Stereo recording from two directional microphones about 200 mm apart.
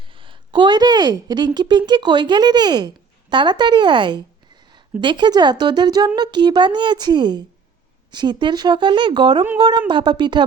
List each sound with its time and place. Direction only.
0.1 s a woman's voice: 25° right (ahead or behind)